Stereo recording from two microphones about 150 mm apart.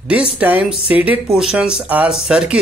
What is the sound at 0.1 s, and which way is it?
A man's voice, 10° right (ahead or behind).